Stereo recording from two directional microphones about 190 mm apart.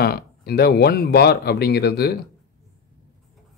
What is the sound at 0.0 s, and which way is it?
Speech, 55° left (ahead or behind).